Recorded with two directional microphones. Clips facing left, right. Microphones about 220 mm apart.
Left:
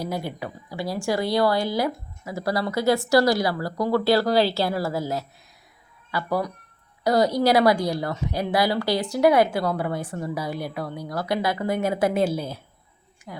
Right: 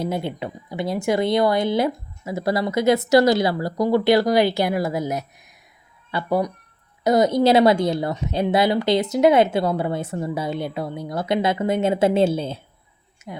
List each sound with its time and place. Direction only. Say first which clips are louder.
0.0 s a woman's voice: right 4 dB; 25° right (ahead or behind)